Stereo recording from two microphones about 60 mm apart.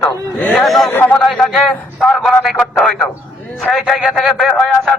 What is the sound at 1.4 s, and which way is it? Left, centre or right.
A man's voice, centre.